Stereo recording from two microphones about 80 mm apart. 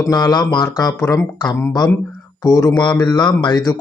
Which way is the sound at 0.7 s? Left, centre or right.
Left.